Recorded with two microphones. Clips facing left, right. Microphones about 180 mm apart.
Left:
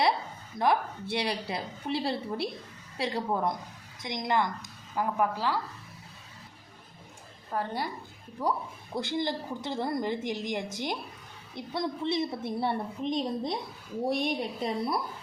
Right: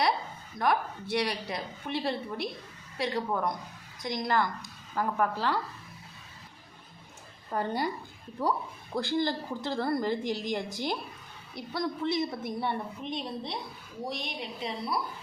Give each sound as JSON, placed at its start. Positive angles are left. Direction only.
{"t": 0.6, "sound": "a woman's voice", "side_deg": 25}
{"t": 7.5, "sound": "a woman's voice", "side_deg": 0}
{"t": 9.0, "sound": "a woman's voice", "side_deg": 20}